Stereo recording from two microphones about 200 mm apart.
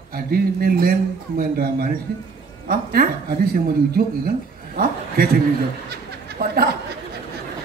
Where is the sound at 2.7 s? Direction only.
50° right (ahead or behind).